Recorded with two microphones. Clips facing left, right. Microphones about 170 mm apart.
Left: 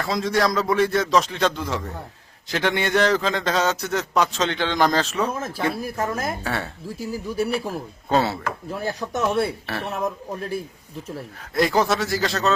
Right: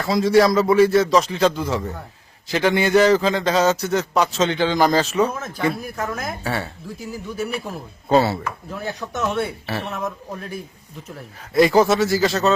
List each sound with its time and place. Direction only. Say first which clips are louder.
0.0 s a man's voice: right 6 dB; 5° right (ahead or behind)
5.8 s speech: left 2 dB; 30° left (ahead or behind)
6.4 s a man's voice: right 2 dB; centre (ahead or behind)
7.0 s speech: left 3 dB; 35° left (ahead or behind)
7.7 s a man's voice: right 4 dB; centre (ahead or behind)
8.7 s speech: left 2 dB; 35° left (ahead or behind)
11.5 s a man's voice: right 5 dB; centre (ahead or behind)